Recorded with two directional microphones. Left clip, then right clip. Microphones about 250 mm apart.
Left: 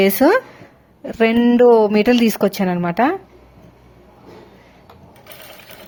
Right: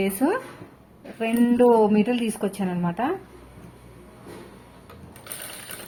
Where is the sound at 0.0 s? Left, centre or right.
Left.